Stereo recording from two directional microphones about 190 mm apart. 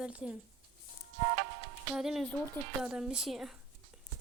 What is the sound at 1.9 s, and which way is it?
Speech, centre (ahead or behind).